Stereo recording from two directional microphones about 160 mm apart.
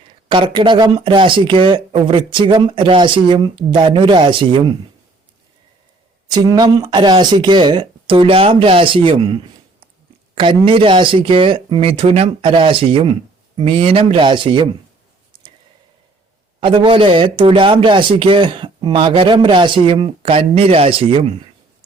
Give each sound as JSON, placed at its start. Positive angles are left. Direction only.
{"t": 0.3, "sound": "speech", "side_deg": -30}
{"t": 6.3, "sound": "speech", "side_deg": -25}
{"t": 16.6, "sound": "speech", "side_deg": -30}